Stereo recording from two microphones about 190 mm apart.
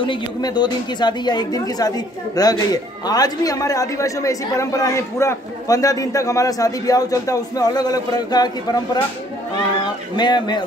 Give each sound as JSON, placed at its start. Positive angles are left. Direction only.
{"t": 0.0, "sound": "a woman's voice", "side_deg": 25}
{"t": 9.8, "sound": "speech", "side_deg": 25}